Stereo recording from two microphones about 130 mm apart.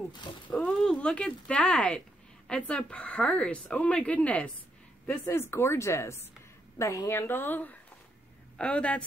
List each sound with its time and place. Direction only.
0.5 s speech: 10° left (ahead or behind)